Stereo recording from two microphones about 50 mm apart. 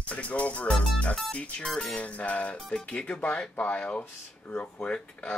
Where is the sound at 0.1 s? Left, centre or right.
Left.